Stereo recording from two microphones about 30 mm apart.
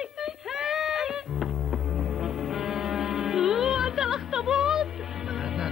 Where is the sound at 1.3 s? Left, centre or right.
Centre.